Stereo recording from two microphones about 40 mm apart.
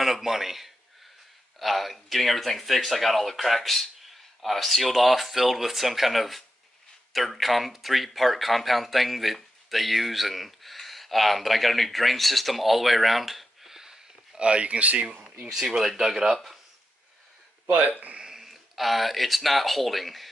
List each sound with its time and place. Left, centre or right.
0.0 s a man's voice: centre
14.4 s speech: right
16.0 s speech: centre
18.2 s speech: centre